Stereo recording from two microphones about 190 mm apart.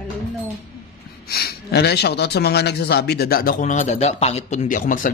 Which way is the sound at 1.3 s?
55° left (ahead or behind).